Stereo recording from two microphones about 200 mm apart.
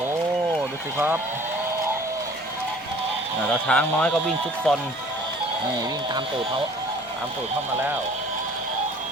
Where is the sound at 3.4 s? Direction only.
5° left (ahead or behind).